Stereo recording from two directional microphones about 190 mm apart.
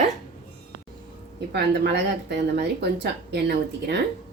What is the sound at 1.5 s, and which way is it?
Speech, 65° right (ahead or behind).